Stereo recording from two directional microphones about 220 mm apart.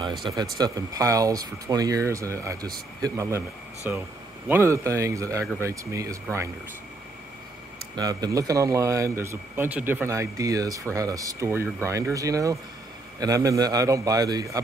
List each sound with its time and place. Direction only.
0.2 s speech: 20° right (ahead or behind)
7.9 s speech: 15° right (ahead or behind)